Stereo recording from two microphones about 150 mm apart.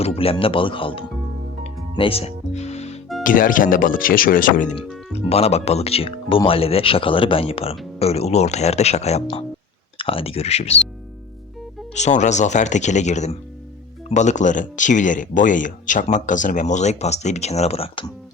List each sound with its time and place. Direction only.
0.0 s speech: 40° left (ahead or behind)
2.0 s music: 40° left (ahead or behind)
3.2 s speech: 65° left (ahead or behind)
5.3 s speech: 45° left (ahead or behind)
11.9 s speech: 50° left (ahead or behind)